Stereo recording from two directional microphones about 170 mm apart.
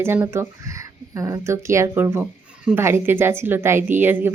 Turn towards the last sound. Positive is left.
turn(degrees=-10)  # may be behind; listen again after turning